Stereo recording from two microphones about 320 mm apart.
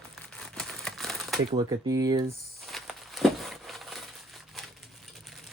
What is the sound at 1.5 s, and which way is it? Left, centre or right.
Speech, centre.